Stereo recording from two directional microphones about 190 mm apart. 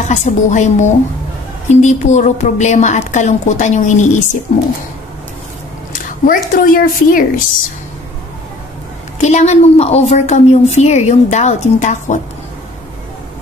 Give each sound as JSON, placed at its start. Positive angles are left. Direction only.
{"t": 0.0, "sound": "a woman's voice", "side_deg": 40}
{"t": 5.9, "sound": "speech", "side_deg": 45}
{"t": 9.2, "sound": "a woman's voice", "side_deg": 35}